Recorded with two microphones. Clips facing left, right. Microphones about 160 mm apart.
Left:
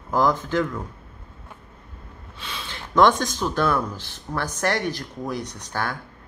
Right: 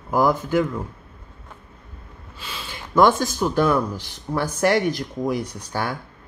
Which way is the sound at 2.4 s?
5° right (ahead or behind).